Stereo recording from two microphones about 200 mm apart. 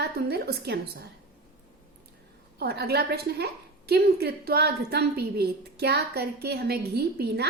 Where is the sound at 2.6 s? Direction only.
50° right (ahead or behind).